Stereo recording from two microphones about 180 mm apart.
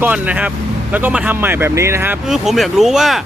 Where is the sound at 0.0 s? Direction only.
10° right (ahead or behind).